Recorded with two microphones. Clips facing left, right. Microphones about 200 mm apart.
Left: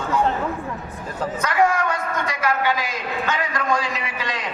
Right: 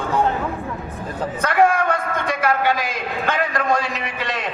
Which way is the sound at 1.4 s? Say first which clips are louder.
Right 3 dB; 55° right (ahead or behind).